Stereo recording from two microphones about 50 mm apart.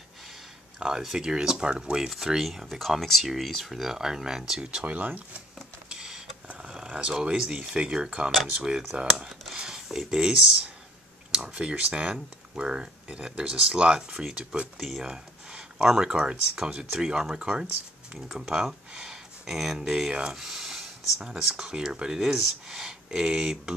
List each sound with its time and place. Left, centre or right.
0.7 s speech: centre
2.0 s speech: centre
4.9 s speech: right
5.9 s a sound: centre
6.4 s speech: centre
11.5 s speech: right
14.8 s speech: centre
20.1 s speech: centre